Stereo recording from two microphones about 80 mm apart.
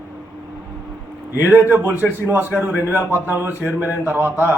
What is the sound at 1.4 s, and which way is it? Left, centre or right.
A man's voice, right.